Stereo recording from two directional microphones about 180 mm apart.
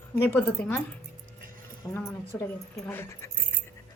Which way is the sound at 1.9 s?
15° left (ahead or behind).